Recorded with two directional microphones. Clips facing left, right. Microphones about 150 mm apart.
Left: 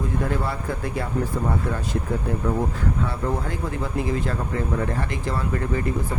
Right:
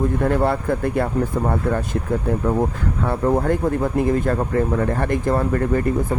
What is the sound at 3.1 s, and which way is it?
Speech, 55° right (ahead or behind).